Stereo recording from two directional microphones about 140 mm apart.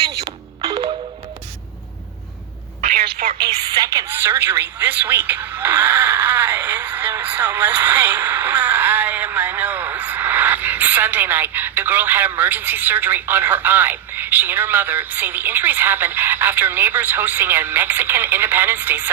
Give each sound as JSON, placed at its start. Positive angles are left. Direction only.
{"t": 0.1, "sound": "music", "side_deg": -25}
{"t": 2.8, "sound": "telephone", "side_deg": -90}
{"t": 3.7, "sound": "a woman's voice", "side_deg": -25}